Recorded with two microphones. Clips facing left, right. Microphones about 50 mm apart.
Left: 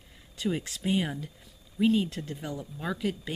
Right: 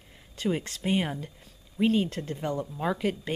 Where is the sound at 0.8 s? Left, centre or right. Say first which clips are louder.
Right 1 dB; right.